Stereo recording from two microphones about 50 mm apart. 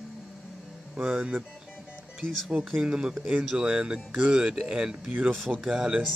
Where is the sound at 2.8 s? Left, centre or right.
Centre.